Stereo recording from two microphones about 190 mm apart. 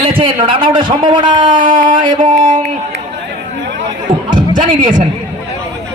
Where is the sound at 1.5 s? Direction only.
45° right (ahead or behind).